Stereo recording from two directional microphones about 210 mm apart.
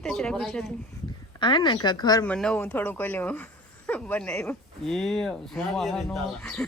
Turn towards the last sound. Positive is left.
turn(degrees=5)  # may be behind; listen again after turning